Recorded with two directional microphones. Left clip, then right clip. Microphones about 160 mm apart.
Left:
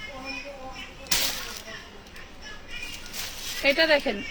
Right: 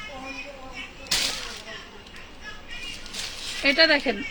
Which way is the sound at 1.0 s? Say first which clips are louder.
Right 1 dB; 70° left (ahead or behind).